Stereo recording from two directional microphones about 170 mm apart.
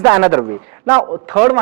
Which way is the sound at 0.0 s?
15° right (ahead or behind).